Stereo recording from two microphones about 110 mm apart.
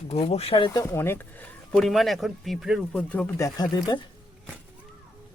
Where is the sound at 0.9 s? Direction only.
20° left (ahead or behind).